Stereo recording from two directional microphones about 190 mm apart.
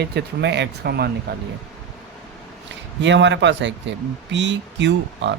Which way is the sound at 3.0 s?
70° right (ahead or behind).